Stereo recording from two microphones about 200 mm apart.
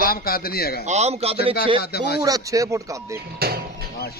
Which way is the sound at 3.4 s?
50° right (ahead or behind).